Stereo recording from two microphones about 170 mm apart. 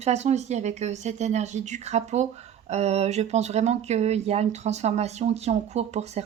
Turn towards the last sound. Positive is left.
turn(degrees=-40)  # may be behind; listen again after turning